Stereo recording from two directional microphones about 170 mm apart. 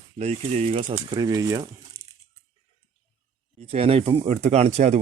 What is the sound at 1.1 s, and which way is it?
Speech, 25° right (ahead or behind).